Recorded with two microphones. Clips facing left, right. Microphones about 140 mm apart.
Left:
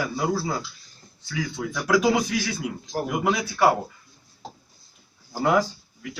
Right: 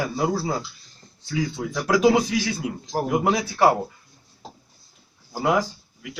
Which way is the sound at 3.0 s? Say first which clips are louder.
Right 3 dB; 30° right (ahead or behind).